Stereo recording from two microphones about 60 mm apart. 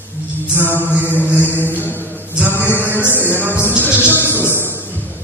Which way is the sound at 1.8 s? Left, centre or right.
Left.